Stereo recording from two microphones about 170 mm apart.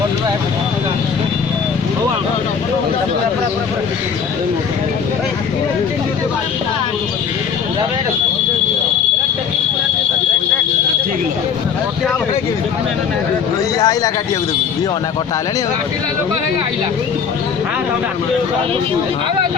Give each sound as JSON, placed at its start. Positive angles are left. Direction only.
{"t": 13.7, "sound": "a man's voice", "side_deg": 20}